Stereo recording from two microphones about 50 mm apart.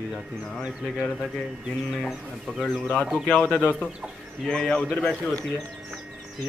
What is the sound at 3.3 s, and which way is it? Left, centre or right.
Speech, left.